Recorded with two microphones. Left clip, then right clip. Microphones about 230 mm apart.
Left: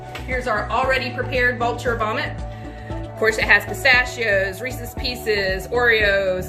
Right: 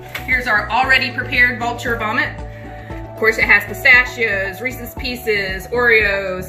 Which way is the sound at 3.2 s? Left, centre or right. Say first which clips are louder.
Right 3 dB; left.